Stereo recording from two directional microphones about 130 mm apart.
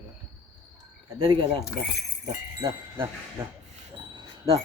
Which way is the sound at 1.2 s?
40° right (ahead or behind).